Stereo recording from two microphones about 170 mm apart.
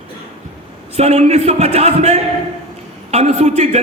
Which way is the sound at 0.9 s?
40° right (ahead or behind).